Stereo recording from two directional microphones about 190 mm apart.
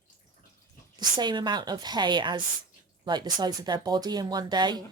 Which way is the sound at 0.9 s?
25° right (ahead or behind).